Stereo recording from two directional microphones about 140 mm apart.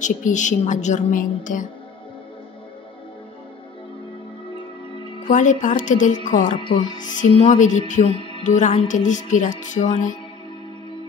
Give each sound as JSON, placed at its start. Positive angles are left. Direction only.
{"t": 0.0, "sound": "a woman's voice", "side_deg": 60}
{"t": 5.3, "sound": "a woman's voice", "side_deg": 65}
{"t": 7.9, "sound": "a woman's voice", "side_deg": 50}